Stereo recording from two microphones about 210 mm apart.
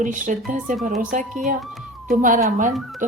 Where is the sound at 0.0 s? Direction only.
40° right (ahead or behind).